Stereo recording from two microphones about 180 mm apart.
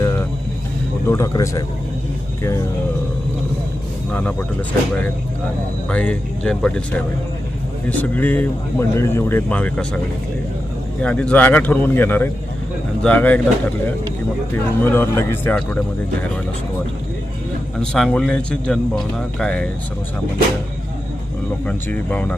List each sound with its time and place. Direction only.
1.0 s speech: 15° left (ahead or behind)
4.1 s speech: 10° left (ahead or behind)
5.9 s speech: 5° left (ahead or behind)
11.0 s speech: 5° left (ahead or behind)
14.5 s speech: 10° left (ahead or behind)
17.7 s speech: 5° left (ahead or behind)
21.7 s speech: 10° left (ahead or behind)